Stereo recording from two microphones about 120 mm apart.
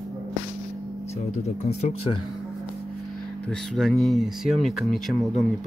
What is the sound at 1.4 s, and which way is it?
Speech, 65° left (ahead or behind).